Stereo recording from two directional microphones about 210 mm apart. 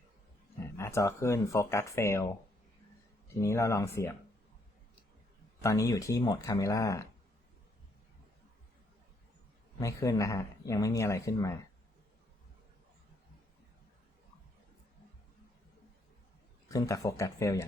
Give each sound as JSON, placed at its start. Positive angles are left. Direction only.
{"t": 0.8, "sound": "speech", "side_deg": 15}
{"t": 3.4, "sound": "speech", "side_deg": 15}
{"t": 5.6, "sound": "speech", "side_deg": 15}
{"t": 9.8, "sound": "speech", "side_deg": 15}
{"t": 16.6, "sound": "speech", "side_deg": 15}